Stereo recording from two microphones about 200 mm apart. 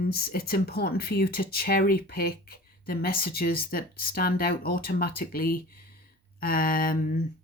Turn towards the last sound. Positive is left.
turn(degrees=45)  # may be behind; listen again after turning